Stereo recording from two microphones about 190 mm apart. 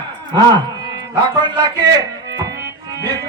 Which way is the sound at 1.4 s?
20° right (ahead or behind).